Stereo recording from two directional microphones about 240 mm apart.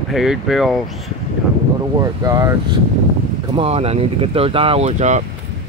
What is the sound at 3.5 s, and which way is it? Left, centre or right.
Speech, right.